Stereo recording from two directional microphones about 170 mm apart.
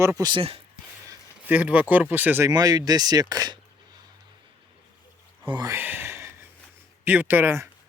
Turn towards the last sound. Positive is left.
turn(degrees=-15)  # may be behind; listen again after turning